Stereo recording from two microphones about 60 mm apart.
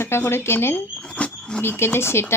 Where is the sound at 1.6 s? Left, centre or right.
Left.